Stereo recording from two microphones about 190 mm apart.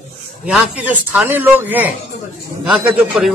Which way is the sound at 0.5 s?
5° right (ahead or behind).